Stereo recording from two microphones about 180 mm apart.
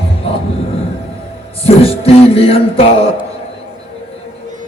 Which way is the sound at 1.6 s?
35° left (ahead or behind).